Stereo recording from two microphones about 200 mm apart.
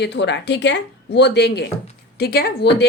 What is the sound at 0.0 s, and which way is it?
A woman's voice, 60° left (ahead or behind).